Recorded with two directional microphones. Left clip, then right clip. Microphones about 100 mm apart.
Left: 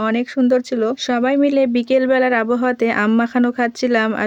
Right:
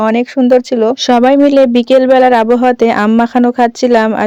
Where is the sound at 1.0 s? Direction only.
75° right (ahead or behind).